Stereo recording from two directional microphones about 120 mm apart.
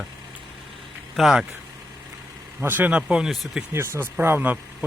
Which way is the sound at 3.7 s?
20° right (ahead or behind).